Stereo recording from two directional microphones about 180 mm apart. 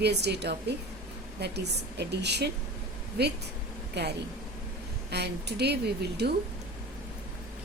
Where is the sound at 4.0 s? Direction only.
70° right (ahead or behind).